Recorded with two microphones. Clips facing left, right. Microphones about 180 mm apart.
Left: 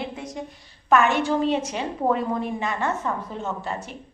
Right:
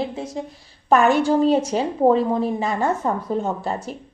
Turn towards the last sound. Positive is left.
turn(degrees=-35)  # may be behind; listen again after turning